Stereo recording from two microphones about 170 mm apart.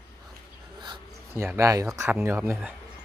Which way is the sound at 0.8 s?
25° right (ahead or behind).